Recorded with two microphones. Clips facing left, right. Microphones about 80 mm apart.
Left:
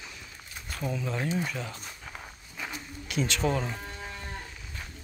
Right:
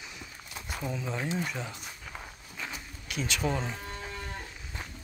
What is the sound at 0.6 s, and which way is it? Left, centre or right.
Speech, centre.